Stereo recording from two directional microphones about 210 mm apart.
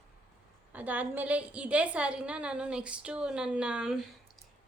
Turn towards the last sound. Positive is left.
turn(degrees=-5)  # may be behind; listen again after turning